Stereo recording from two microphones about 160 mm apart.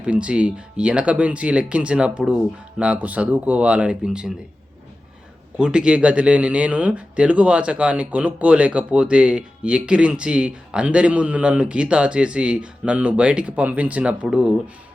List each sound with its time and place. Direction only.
0.0 s speech: 5° right (ahead or behind)
5.5 s speech: 5° right (ahead or behind)